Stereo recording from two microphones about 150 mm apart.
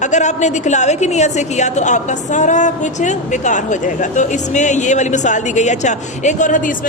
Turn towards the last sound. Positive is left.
turn(degrees=60)  # may be behind; listen again after turning